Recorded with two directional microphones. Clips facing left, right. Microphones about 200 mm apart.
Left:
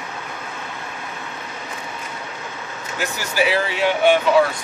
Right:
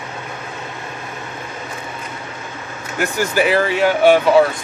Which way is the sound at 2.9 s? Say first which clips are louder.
Right 5 dB; 50° right (ahead or behind).